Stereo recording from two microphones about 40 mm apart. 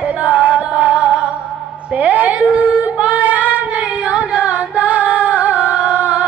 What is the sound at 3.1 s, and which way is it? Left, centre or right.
Carnatic music, right.